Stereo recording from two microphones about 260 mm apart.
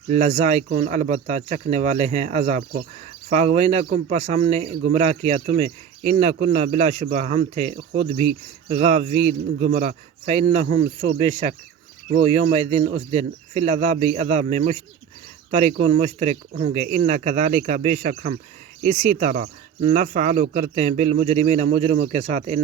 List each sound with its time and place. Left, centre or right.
0.1 s speech: right